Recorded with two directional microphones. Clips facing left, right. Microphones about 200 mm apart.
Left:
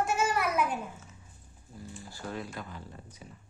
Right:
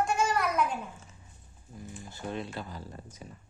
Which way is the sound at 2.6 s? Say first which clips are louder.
Right 2 dB; 35° right (ahead or behind).